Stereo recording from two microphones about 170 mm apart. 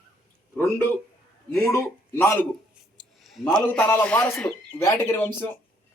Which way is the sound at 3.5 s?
10° left (ahead or behind).